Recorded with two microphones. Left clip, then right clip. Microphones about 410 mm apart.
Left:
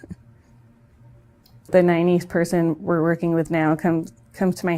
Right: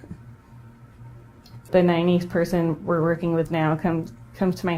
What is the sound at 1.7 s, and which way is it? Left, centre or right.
A woman's voice, left.